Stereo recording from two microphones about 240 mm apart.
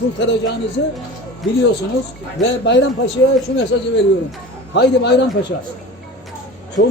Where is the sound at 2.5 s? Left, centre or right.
Left.